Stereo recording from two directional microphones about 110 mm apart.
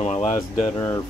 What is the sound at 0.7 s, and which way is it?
Speech, 30° left (ahead or behind).